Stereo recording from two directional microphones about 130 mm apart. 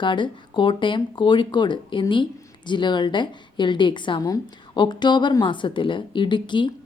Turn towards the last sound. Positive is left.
turn(degrees=35)  # may be behind; listen again after turning